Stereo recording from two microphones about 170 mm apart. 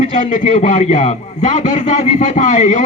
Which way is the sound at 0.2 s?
50° left (ahead or behind).